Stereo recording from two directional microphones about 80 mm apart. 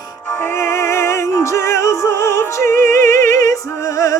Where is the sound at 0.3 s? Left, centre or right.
Left.